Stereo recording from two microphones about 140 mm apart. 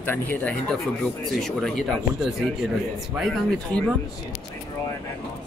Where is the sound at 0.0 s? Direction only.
15° left (ahead or behind).